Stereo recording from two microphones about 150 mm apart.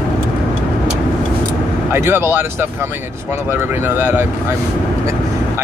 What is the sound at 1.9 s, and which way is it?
Speech, 15° right (ahead or behind).